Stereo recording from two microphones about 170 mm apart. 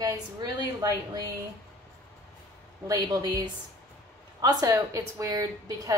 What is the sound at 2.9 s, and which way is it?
A woman's voice, 20° right (ahead or behind).